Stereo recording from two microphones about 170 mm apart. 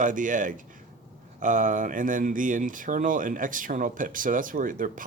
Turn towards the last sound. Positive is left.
turn(degrees=-50)  # may be behind; listen again after turning